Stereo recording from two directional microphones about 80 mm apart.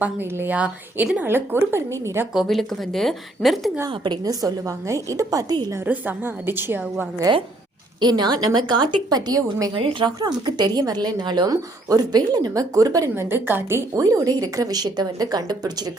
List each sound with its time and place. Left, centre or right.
0.0 s a woman's voice: right
2.3 s a woman's voice: centre
3.8 s a woman's voice: right
4.3 s a woman's voice: right
5.8 s a woman's voice: right
7.3 s a woman's voice: right
13.1 s a woman's voice: right
13.9 s a woman's voice: right